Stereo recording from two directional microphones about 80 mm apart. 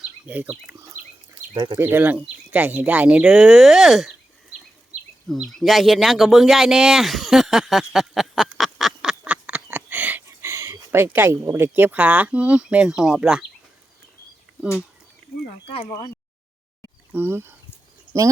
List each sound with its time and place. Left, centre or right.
0.3 s speech: centre
1.5 s speech: right
1.8 s speech: right; by 4.1 s centre
5.3 s bird: centre; by 10.2 s right
10.2 s a sound: right
11.5 s speech: right; by 13.4 s centre
17.1 s speech: right